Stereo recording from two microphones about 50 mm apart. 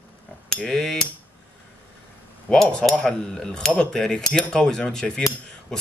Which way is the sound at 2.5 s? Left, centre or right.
Centre.